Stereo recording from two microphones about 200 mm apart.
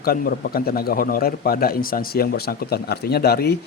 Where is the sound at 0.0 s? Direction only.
50° left (ahead or behind).